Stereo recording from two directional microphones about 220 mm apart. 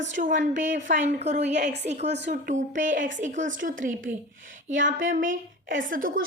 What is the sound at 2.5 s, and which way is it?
Speech, 35° right (ahead or behind).